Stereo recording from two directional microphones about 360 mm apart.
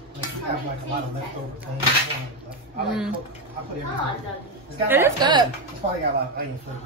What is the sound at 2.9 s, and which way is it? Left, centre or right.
Speech, centre.